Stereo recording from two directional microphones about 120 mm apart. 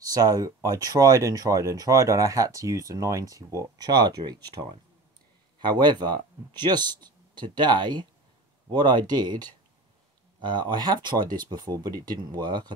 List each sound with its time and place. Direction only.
0.0 s speech: 30° right (ahead or behind)